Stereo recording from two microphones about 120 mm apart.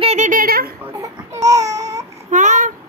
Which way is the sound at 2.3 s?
90° right.